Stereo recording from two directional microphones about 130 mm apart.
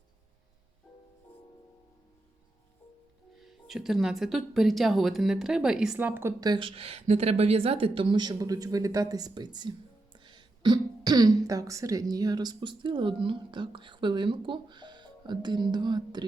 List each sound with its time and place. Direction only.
3.3 s a woman's voice: centre (ahead or behind)
6.4 s a woman's voice: 35° right (ahead or behind)